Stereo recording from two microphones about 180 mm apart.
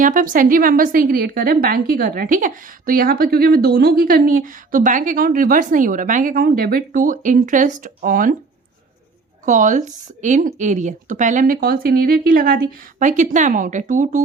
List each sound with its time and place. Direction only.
0.0 s a woman's voice: 50° right (ahead or behind)
9.5 s a woman's voice: 45° right (ahead or behind)
13.0 s a woman's voice: 45° right (ahead or behind)